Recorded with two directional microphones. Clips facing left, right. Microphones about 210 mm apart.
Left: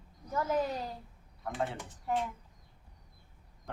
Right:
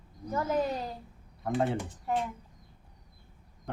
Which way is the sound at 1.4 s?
35° right (ahead or behind).